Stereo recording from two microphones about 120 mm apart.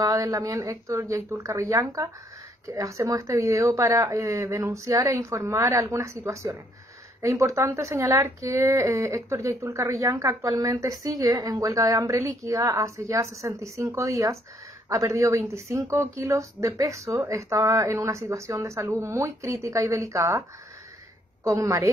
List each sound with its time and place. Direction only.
0.0 s speech: 30° right (ahead or behind)
21.5 s speech: 30° right (ahead or behind)